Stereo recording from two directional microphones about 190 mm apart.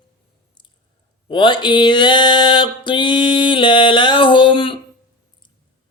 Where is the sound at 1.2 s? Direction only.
25° left (ahead or behind).